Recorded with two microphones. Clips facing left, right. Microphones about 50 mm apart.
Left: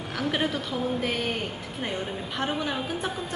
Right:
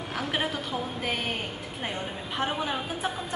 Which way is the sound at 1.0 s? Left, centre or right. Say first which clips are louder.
Left 2 dB; centre.